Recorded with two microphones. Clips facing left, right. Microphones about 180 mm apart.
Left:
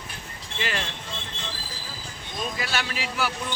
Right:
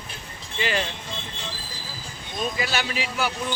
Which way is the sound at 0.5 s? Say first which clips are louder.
Right 4 dB; centre (ahead or behind).